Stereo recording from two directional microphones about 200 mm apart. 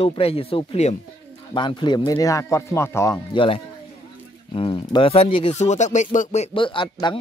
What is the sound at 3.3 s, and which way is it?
Speech, 25° left (ahead or behind).